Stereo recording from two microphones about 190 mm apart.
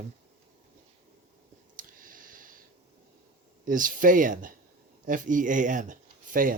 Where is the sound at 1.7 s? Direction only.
45° right (ahead or behind).